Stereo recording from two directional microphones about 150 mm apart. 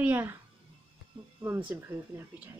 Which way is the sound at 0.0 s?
15° right (ahead or behind).